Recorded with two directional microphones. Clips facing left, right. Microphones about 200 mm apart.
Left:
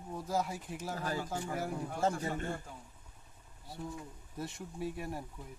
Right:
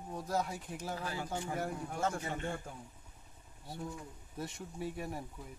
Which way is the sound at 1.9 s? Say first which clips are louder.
Left 3 dB; 35° left (ahead or behind).